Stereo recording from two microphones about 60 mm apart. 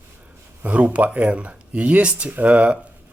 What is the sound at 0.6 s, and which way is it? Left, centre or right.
Speech, right.